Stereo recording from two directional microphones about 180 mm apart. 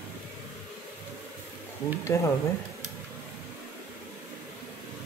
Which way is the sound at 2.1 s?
15° left (ahead or behind).